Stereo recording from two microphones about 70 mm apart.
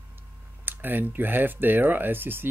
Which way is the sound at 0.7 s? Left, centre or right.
Right.